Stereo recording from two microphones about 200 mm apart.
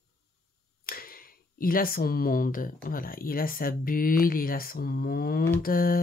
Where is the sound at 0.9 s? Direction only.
45° left (ahead or behind).